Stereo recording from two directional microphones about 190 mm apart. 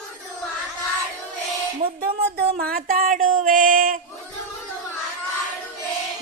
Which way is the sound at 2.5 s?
50° right (ahead or behind).